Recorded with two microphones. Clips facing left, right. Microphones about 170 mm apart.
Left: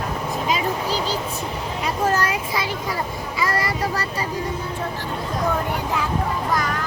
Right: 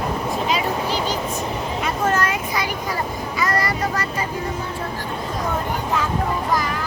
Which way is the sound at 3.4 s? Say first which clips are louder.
Right 1 dB; 25° left (ahead or behind).